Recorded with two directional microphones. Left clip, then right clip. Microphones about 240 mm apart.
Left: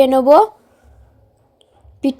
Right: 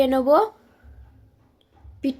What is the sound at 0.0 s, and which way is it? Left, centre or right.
Speech, left.